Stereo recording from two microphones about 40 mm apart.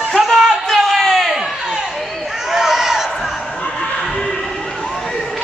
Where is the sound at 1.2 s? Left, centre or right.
Centre.